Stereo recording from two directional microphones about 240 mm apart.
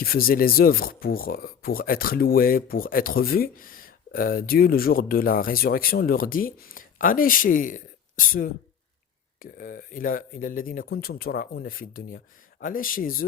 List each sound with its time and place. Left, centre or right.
0.0 s speech: left